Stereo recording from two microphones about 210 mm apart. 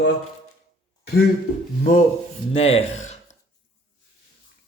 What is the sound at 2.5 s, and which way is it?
Speech, 30° left (ahead or behind).